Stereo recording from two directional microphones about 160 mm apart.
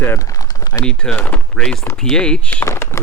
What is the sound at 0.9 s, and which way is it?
Speech, 5° left (ahead or behind).